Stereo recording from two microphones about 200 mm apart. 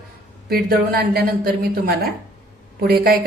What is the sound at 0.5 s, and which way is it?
A woman's voice, 50° right (ahead or behind).